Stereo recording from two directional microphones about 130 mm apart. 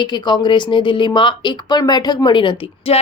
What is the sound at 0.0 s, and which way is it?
Speech, 35° left (ahead or behind).